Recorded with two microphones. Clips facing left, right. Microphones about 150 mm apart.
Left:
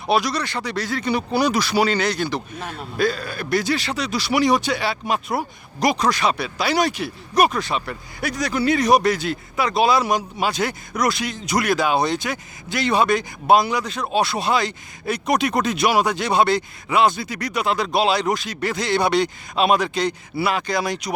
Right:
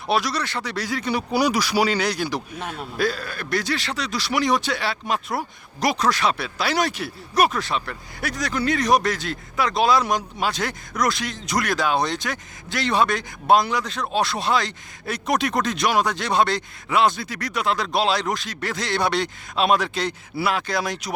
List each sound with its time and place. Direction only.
0.1 s speech: centre (ahead or behind)